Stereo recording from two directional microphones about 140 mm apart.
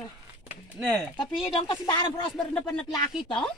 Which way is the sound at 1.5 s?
35° left (ahead or behind).